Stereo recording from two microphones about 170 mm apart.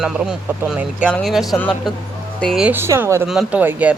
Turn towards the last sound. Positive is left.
turn(degrees=-10)  # may be behind; listen again after turning